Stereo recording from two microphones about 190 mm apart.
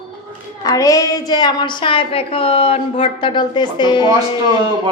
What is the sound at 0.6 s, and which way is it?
A woman's voice, 20° left (ahead or behind).